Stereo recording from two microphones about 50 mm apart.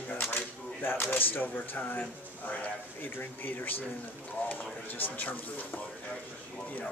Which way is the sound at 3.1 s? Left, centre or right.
Left.